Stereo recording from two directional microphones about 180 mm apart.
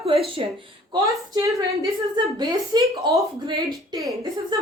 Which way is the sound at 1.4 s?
20° right (ahead or behind).